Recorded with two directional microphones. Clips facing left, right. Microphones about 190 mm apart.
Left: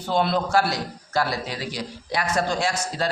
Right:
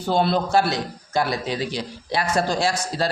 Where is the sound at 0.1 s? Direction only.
30° right (ahead or behind).